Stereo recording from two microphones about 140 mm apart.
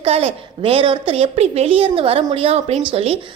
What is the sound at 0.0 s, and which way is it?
A woman's voice, 45° right (ahead or behind).